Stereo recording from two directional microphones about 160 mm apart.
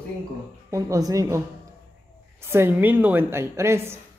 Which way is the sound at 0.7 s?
20° right (ahead or behind).